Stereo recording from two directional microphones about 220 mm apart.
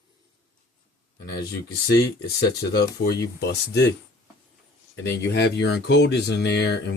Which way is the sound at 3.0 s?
45° left (ahead or behind).